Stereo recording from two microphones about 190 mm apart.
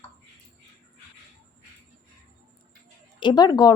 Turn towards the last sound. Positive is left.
turn(degrees=20)  # may be behind; listen again after turning